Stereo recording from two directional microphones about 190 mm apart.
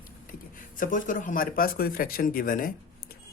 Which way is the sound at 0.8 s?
45° left (ahead or behind).